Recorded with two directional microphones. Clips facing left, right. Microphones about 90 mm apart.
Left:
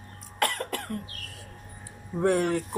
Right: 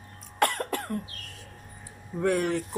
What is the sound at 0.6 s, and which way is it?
Cough, 30° right (ahead or behind).